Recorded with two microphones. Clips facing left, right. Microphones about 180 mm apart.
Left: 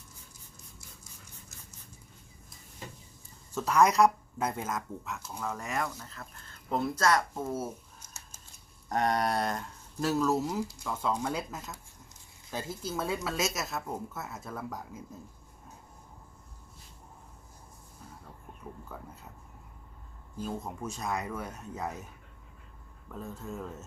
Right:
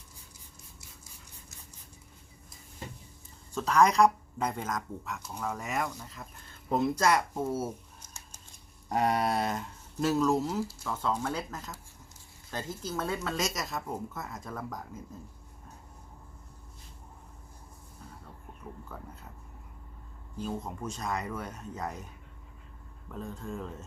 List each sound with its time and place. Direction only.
3.5 s speech: 5° left (ahead or behind)
6.7 s speech: 15° right (ahead or behind)
8.0 s a sound: 5° left (ahead or behind)
8.9 s speech: 10° right (ahead or behind); by 15.0 s 10° left (ahead or behind)
20.4 s speech: 10° left (ahead or behind)